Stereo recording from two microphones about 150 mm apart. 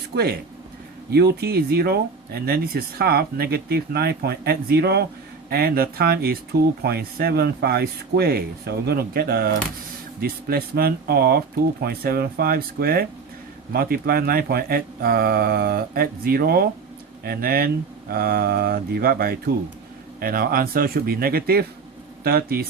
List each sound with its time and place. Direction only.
0.1 s speech: 90° right